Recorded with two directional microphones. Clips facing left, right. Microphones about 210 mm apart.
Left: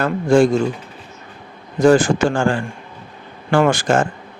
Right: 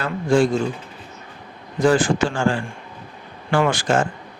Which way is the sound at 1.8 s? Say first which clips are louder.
Left 4 dB; 45° left (ahead or behind).